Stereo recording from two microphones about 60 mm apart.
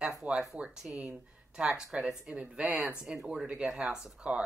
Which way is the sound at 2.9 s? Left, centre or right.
Centre.